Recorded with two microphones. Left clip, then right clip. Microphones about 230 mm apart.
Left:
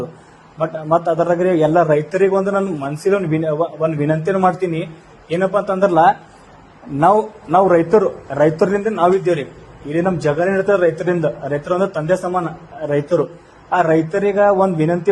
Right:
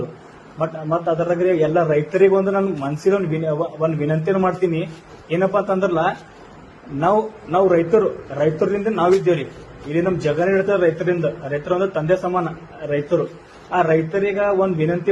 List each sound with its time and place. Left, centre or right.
0.6 s a man's voice: left